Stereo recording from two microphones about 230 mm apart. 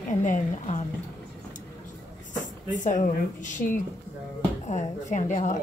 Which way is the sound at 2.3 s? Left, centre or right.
Left.